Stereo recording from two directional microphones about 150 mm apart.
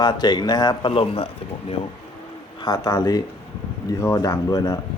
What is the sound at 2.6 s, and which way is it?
Speech, 25° left (ahead or behind).